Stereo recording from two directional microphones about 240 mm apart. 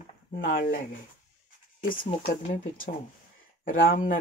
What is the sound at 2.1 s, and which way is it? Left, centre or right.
Speech, left.